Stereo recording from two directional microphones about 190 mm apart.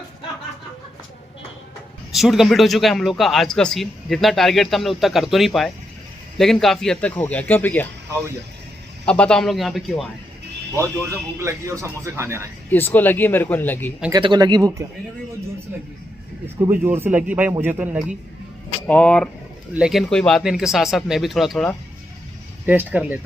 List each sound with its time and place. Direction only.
2.1 s a man's voice: centre (ahead or behind)
9.0 s a man's voice: 5° left (ahead or behind)
11.3 s speech: 15° right (ahead or behind)
12.7 s speech: 10° left (ahead or behind)
14.1 s speech: 25° right (ahead or behind)
16.6 s speech: 15° right (ahead or behind)
18.9 s a man's voice: 5° left (ahead or behind)